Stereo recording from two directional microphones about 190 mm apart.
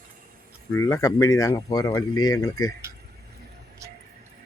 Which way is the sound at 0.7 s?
15° left (ahead or behind).